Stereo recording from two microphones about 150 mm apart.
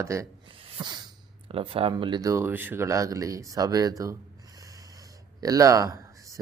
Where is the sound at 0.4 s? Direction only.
35° right (ahead or behind).